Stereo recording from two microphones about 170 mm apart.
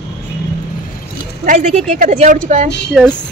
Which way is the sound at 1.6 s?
35° right (ahead or behind).